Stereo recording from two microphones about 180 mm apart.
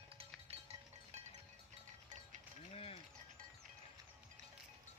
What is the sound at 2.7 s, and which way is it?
Ratchet, 35° left (ahead or behind).